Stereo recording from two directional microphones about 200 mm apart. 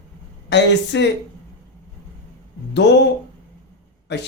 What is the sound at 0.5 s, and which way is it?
Speech, 65° left (ahead or behind).